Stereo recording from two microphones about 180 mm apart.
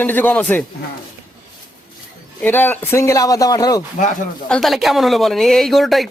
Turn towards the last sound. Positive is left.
turn(degrees=0)  # may be behind; listen again after turning